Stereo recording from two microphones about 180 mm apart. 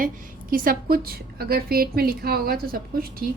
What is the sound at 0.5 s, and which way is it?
A woman's voice, 55° right (ahead or behind).